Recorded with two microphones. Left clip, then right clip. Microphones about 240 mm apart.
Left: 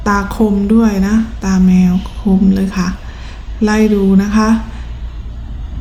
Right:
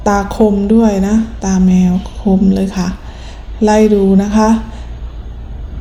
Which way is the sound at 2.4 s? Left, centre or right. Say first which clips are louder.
Even; centre.